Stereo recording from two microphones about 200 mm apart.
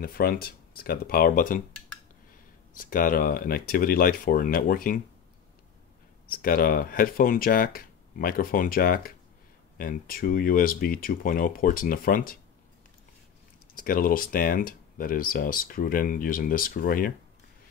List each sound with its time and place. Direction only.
0.0 s speech: 45° left (ahead or behind)
2.8 s speech: 45° left (ahead or behind)
6.3 s speech: 45° left (ahead or behind)
13.7 s speech: 45° left (ahead or behind)